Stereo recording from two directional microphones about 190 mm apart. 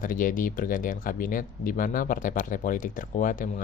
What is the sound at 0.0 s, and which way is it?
Speech, 45° left (ahead or behind).